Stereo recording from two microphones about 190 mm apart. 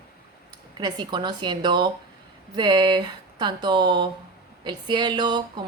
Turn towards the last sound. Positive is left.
turn(degrees=-25)  # may be behind; listen again after turning